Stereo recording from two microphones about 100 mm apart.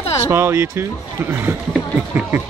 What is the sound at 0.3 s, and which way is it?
Speech, 25° right (ahead or behind).